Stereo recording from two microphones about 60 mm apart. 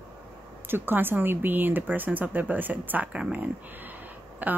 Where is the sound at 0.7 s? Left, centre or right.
Right.